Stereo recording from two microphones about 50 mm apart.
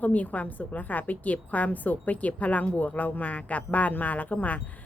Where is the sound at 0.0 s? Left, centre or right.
Left.